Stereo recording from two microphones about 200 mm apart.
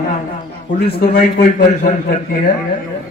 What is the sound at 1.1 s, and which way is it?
A man's voice, 45° left (ahead or behind).